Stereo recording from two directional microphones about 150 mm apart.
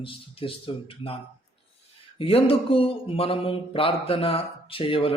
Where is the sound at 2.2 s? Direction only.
40° left (ahead or behind).